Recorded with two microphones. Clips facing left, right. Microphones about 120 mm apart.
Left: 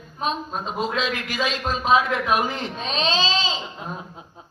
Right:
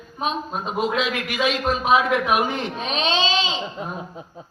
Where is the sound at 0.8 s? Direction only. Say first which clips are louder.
Right 2 dB; 30° left (ahead or behind).